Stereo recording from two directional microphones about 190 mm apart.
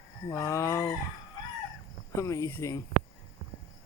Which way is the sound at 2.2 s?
15° left (ahead or behind).